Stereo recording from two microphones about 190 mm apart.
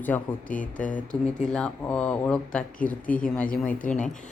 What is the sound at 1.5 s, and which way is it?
Speech, 5° left (ahead or behind).